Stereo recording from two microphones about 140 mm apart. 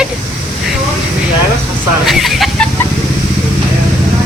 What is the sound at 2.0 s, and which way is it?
Speech, centre (ahead or behind).